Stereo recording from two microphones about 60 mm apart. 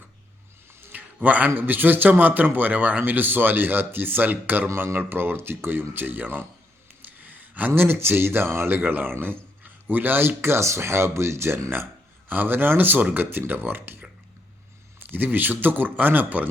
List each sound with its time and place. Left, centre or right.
0.8 s speech: right
4.7 s speech: right
4.9 s speech: right
7.0 s gasp: right
7.8 s speech: right
12.3 s speech: right